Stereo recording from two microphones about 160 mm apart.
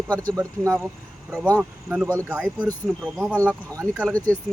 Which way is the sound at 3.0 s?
Centre (ahead or behind).